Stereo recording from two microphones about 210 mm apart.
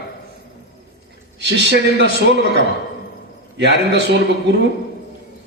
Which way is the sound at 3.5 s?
55° right (ahead or behind).